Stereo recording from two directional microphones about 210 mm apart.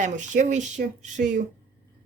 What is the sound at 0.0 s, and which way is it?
Speech, 35° right (ahead or behind).